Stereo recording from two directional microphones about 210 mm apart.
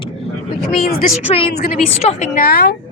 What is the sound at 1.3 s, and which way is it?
A woman's voice, 25° left (ahead or behind).